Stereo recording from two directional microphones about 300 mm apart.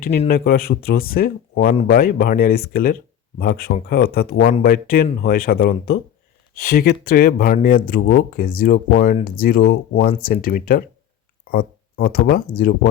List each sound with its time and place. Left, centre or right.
0.0 s speech: left